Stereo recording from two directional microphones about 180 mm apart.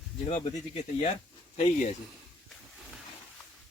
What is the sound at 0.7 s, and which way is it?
Speech, 35° left (ahead or behind).